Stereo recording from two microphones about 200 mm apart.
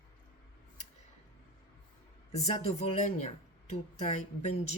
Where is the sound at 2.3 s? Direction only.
30° left (ahead or behind).